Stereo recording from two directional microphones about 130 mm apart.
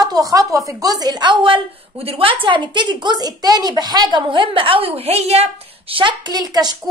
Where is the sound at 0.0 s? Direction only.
30° right (ahead or behind).